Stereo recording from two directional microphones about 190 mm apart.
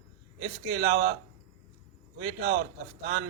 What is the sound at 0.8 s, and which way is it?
Speech, 55° right (ahead or behind).